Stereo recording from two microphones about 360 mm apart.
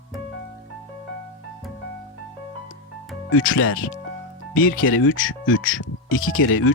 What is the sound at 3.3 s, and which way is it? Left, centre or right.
Speech, left.